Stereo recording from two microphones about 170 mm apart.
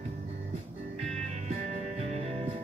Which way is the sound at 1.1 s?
40° right (ahead or behind).